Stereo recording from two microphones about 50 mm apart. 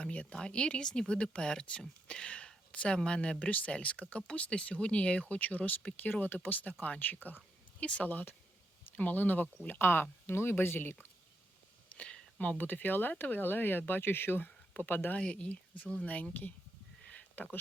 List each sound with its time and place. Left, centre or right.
0.0 s a sound: left
0.3 s speech: centre; by 10.9 s left
11.9 s a sound: left
12.5 s speech: left
15.1 s speech: left
17.3 s speech: left